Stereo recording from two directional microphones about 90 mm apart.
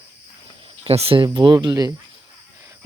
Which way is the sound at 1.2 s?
55° right (ahead or behind).